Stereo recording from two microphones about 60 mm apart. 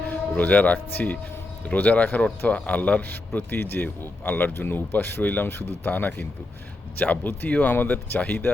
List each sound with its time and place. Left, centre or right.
0.1 s speech: left